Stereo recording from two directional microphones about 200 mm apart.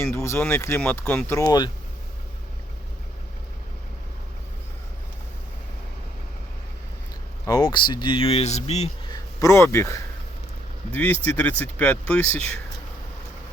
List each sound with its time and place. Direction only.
0.0 s speech: 15° left (ahead or behind)
7.4 s speech: 20° left (ahead or behind)
9.1 s speech: 15° left (ahead or behind)